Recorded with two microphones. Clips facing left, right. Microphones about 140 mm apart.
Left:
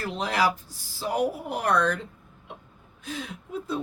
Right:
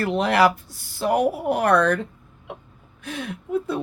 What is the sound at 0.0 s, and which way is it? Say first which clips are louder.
Speech: right 7 dB; 65° right (ahead or behind).